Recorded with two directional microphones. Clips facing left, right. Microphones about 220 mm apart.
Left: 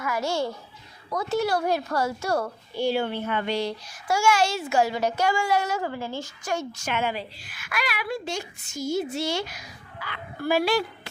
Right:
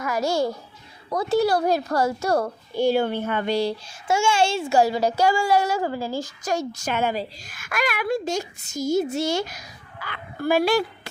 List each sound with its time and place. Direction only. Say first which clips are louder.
0.0 s a child's voice: right 4 dB; 40° right (ahead or behind)